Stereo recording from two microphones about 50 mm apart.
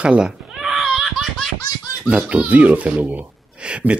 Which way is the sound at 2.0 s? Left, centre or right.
Right.